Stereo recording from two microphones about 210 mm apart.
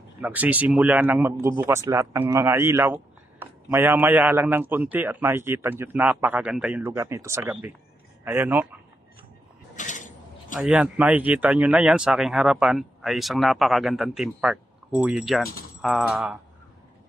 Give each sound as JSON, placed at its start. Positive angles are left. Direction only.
{"t": 0.2, "sound": "a man's voice", "side_deg": -5}
{"t": 9.8, "sound": "a sound", "side_deg": 35}
{"t": 10.6, "sound": "speech", "side_deg": -5}